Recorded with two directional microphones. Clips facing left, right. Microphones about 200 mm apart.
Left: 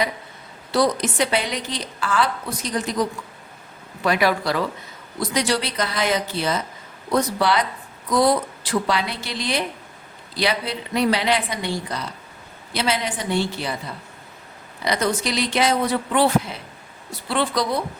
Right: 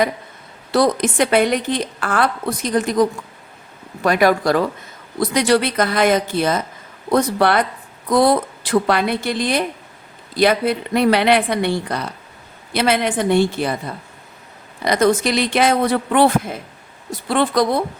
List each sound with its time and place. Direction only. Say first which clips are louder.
0.7 s a woman's voice: right 4 dB; 55° right (ahead or behind)